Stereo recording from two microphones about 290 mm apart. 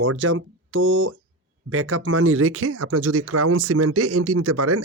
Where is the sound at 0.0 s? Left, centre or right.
Right.